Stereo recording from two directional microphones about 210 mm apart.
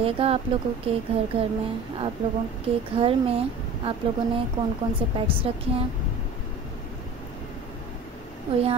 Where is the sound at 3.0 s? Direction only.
25° right (ahead or behind).